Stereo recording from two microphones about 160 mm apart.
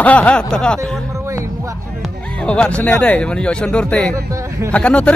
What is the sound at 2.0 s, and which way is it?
Speech, 5° left (ahead or behind).